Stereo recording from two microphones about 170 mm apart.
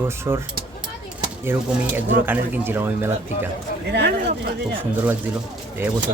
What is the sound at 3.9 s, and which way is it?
Speech, 80° right.